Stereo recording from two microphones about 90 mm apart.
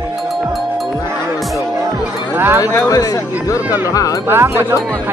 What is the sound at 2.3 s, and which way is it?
Speech, 25° right (ahead or behind).